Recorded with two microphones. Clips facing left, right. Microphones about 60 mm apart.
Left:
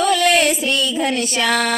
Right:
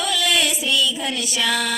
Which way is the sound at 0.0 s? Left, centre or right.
Left.